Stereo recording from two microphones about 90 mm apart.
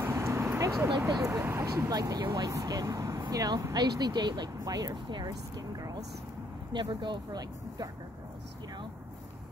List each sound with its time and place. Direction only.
0.0 s vehicle: 30° right (ahead or behind)
1.2 s speech: 30° right (ahead or behind)
1.9 s speech: 45° right (ahead or behind)
6.7 s speech: 60° right (ahead or behind)